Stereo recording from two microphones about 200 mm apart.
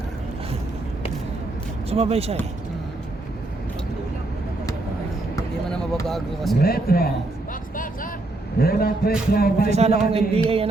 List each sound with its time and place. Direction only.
1.9 s speech: 30° right (ahead or behind)
6.1 s speech: centre (ahead or behind)
6.6 s speech: 50° left (ahead or behind)
8.5 s speech: 50° left (ahead or behind)
9.6 s speech: 35° right (ahead or behind)
10.1 s music: 30° right (ahead or behind)